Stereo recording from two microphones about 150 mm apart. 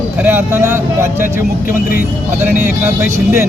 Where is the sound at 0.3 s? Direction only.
15° right (ahead or behind).